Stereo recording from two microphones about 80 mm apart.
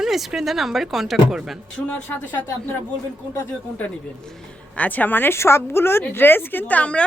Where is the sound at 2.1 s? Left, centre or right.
Left.